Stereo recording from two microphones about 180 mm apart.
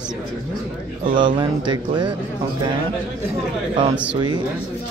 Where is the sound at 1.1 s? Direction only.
25° right (ahead or behind).